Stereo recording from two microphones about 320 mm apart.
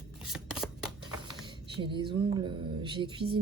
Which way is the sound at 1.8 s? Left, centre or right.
Centre.